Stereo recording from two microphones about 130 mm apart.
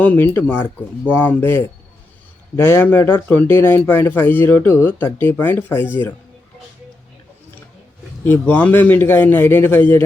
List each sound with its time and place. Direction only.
0.0 s speech: 15° left (ahead or behind)
8.2 s speech: 15° left (ahead or behind)